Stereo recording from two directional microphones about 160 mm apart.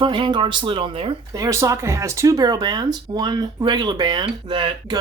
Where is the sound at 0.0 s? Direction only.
30° right (ahead or behind).